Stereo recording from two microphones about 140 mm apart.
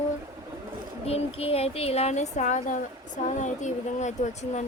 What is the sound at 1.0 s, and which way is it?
A woman's voice, 45° left (ahead or behind).